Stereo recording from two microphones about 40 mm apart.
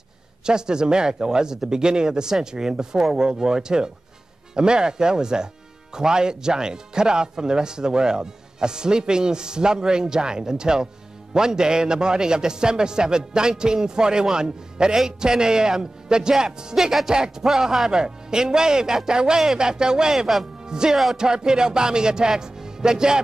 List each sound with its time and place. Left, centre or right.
0.5 s speech: centre